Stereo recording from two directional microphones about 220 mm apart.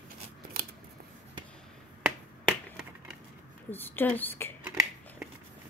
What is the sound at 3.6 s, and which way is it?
Speech, 10° left (ahead or behind).